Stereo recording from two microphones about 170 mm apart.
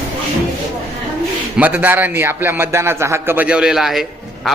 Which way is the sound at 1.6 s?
10° right (ahead or behind).